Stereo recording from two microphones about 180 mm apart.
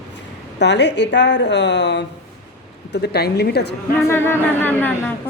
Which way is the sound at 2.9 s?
65° left (ahead or behind).